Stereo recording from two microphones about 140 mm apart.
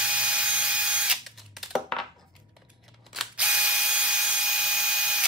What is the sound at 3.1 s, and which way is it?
Ratchet, 5° right (ahead or behind).